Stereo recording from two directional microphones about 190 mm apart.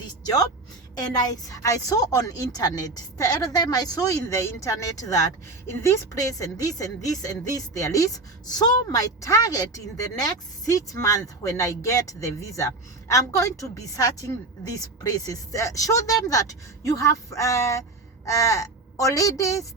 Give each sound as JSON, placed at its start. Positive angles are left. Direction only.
{"t": 0.9, "sound": "a woman's voice", "side_deg": 20}